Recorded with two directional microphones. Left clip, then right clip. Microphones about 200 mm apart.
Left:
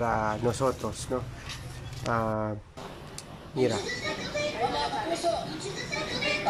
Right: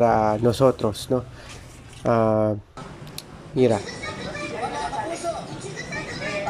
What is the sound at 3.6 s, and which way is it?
Speech, 25° right (ahead or behind).